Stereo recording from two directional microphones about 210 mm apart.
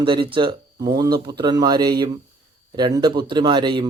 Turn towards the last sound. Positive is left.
turn(degrees=-20)  # may be behind; listen again after turning